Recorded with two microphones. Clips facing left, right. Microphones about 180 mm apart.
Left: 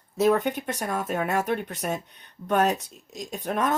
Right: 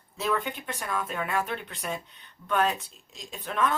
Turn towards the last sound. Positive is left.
turn(degrees=45)  # may be behind; listen again after turning